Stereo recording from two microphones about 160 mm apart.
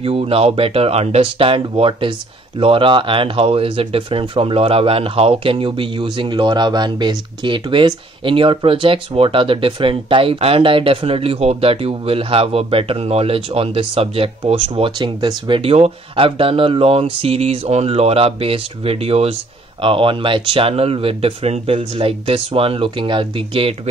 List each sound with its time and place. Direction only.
0.0 s speech: 35° right (ahead or behind)